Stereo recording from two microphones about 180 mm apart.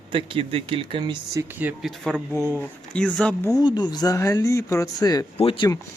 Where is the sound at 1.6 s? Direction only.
Centre (ahead or behind).